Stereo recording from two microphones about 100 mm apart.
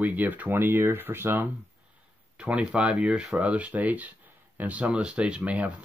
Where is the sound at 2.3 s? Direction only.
10° right (ahead or behind).